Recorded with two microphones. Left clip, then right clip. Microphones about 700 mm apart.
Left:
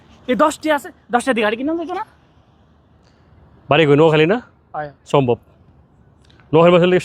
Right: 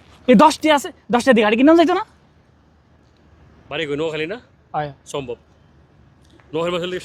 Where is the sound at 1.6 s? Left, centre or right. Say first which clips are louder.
Right 10 dB; right.